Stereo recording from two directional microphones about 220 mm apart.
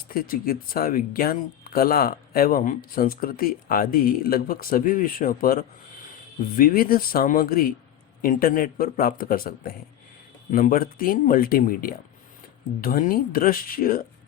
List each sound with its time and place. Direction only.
0.1 s speech: 40° left (ahead or behind)